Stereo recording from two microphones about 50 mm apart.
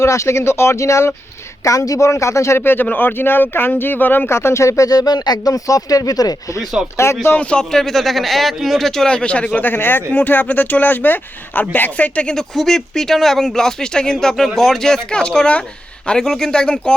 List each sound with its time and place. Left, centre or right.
0.0 s speech: left
2.6 s speech: left
4.3 s speech: left
6.9 s speech: left
7.3 s a man's voice: left
7.7 s speech: centre
9.6 s speech: left
12.3 s speech: centre